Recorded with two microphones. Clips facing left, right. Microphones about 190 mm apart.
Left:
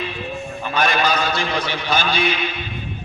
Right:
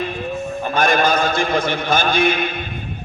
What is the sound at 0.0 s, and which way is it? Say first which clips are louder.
A man's voice: right 4 dB; 50° right (ahead or behind).